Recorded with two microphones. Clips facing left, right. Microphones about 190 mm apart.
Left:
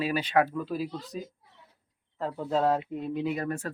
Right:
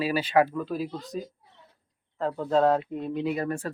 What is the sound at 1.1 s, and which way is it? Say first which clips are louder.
Speech: right 6 dB; 45° right (ahead or behind).